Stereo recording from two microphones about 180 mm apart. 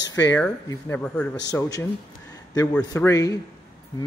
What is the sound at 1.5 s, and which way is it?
Speech, 20° left (ahead or behind).